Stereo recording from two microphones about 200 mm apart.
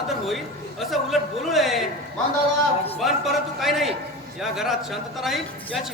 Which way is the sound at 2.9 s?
Centre (ahead or behind).